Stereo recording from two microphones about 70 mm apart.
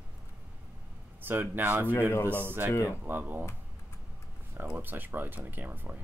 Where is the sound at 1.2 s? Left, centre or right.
Right.